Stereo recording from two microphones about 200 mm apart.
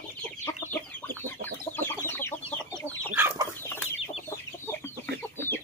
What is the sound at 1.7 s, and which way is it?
Chicken, 10° left (ahead or behind).